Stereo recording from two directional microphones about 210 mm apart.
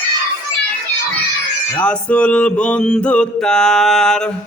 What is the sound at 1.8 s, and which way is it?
Mantra, 5° left (ahead or behind).